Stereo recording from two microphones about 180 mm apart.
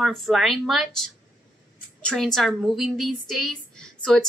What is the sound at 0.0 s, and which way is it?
A woman's voice, centre (ahead or behind).